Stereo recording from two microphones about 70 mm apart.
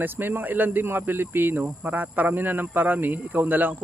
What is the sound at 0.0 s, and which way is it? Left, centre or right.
Speech, right.